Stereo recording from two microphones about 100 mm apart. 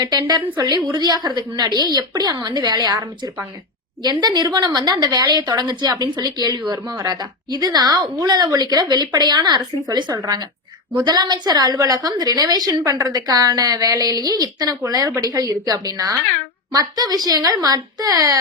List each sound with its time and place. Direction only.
0.0 s a woman's voice: 40° right (ahead or behind)